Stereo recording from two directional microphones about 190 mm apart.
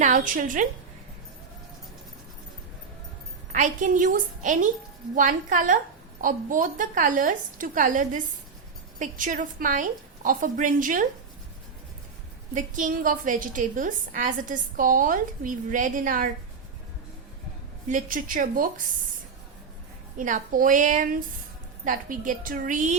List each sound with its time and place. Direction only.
0.0 s a woman's voice: 40° right (ahead or behind)
3.5 s a woman's voice: 40° right (ahead or behind)
12.5 s a woman's voice: 45° right (ahead or behind)
17.8 s a woman's voice: 45° right (ahead or behind)
20.1 s a woman's voice: 40° right (ahead or behind)